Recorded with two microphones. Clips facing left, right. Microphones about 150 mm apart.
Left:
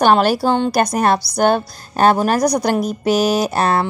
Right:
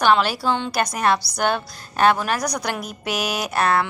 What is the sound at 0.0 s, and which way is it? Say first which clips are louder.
A woman's voice: left 5 dB; 45° left (ahead or behind).